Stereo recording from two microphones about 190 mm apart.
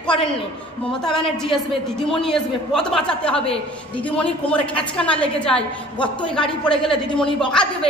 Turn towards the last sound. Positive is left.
turn(degrees=5)  # may be behind; listen again after turning